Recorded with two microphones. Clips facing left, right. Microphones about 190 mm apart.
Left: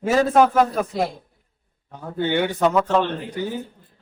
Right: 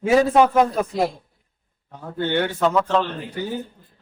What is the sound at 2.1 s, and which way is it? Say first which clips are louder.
Speech: left 1 dB; 10° left (ahead or behind).